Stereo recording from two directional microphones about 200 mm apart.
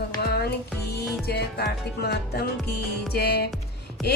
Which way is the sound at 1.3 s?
55° left (ahead or behind).